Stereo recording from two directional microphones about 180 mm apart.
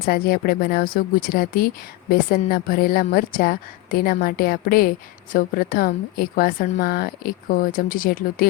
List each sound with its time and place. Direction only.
0.0 s a woman's voice: 55° left (ahead or behind)